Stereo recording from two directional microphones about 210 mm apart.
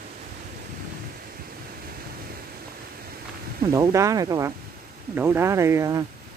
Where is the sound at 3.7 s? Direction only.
15° right (ahead or behind).